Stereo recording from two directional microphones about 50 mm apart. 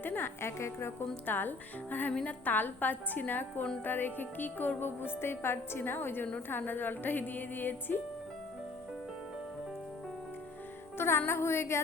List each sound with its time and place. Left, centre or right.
0.0 s speech: left
0.4 s speech: left
1.3 s a woman's voice: left
10.9 s music: left
11.3 s speech: left